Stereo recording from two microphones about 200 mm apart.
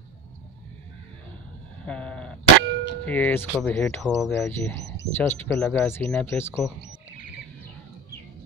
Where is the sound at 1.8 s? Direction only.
5° left (ahead or behind).